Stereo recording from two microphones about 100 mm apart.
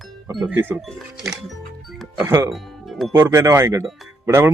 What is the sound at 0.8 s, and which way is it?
Speech, centre (ahead or behind).